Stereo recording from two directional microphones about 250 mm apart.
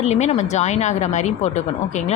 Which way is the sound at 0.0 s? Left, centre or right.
Left.